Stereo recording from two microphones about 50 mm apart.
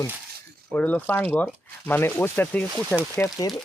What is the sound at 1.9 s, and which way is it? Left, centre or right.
Speech, left.